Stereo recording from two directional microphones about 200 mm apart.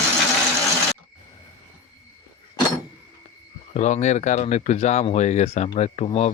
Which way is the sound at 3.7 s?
35° left (ahead or behind).